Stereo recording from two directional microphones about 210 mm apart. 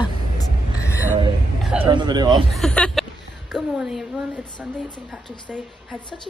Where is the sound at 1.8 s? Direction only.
20° right (ahead or behind).